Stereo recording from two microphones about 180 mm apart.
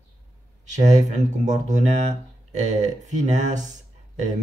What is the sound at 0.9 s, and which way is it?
Speech, 40° right (ahead or behind).